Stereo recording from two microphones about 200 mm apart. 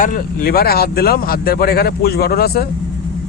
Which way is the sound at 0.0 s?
45° left (ahead or behind).